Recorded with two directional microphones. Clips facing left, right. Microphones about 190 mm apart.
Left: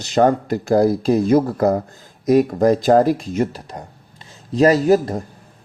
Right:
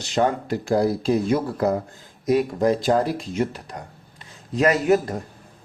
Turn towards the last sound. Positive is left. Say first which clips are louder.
# left 4 dB
turn(degrees=35)  # may be behind; listen again after turning